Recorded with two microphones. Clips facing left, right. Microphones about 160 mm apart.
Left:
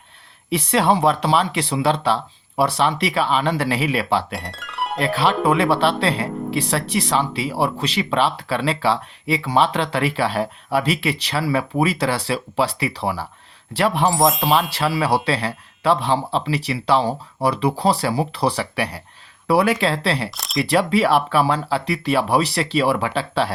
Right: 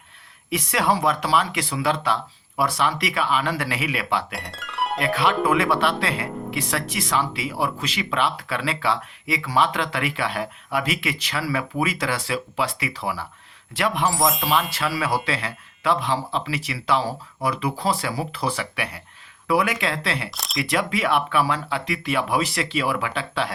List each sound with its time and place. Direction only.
0.5 s speech: 30° left (ahead or behind)
4.4 s music: centre (ahead or behind)
4.9 s speech: 30° left (ahead or behind)
14.2 s speech: centre (ahead or behind)
14.7 s speech: 30° left (ahead or behind)
20.3 s speech: centre (ahead or behind)
20.7 s speech: 35° left (ahead or behind)